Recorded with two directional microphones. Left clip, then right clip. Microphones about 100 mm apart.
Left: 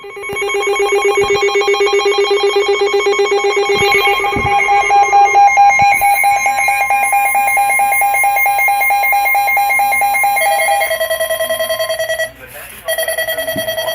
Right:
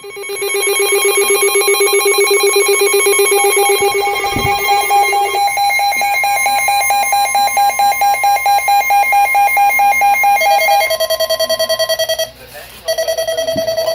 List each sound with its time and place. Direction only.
1.3 s telephone bell ringing: 90° right
4.9 s alarm clock: 20° right (ahead or behind)
7.8 s alarm: 50° right (ahead or behind); by 10.8 s 20° right (ahead or behind)